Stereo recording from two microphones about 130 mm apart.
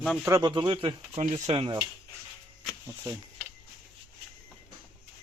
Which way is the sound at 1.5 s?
45° right (ahead or behind).